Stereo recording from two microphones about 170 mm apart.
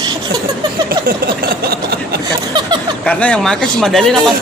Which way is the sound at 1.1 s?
65° right (ahead or behind).